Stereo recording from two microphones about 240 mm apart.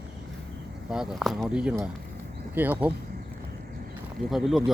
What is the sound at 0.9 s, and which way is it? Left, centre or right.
Speech, centre.